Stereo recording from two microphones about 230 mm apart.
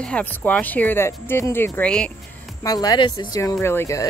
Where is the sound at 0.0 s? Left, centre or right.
Centre.